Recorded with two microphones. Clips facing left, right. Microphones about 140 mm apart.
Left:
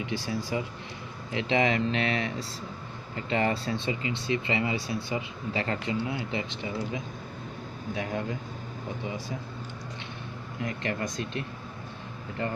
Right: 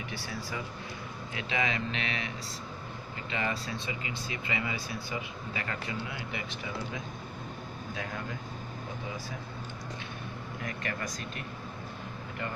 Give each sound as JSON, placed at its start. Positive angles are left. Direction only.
{"t": 0.0, "sound": "speech", "side_deg": 25}
{"t": 10.6, "sound": "speech", "side_deg": 25}